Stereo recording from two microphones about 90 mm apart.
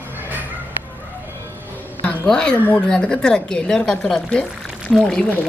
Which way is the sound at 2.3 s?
10° left (ahead or behind).